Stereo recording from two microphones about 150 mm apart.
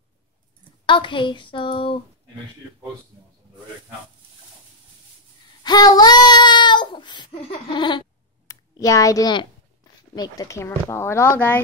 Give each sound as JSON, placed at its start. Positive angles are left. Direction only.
{"t": 0.8, "sound": "speech", "side_deg": 35}
{"t": 5.6, "sound": "child singing", "side_deg": 25}
{"t": 8.5, "sound": "speech", "side_deg": 25}